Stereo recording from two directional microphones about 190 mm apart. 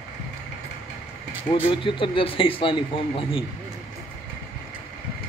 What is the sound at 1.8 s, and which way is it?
Speech, 25° left (ahead or behind).